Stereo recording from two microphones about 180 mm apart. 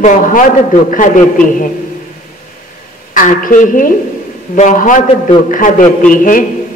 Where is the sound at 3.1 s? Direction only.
50° left (ahead or behind).